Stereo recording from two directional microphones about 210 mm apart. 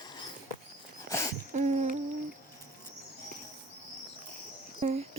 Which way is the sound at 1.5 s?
35° right (ahead or behind).